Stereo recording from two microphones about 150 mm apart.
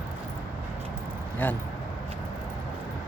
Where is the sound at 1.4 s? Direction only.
10° left (ahead or behind).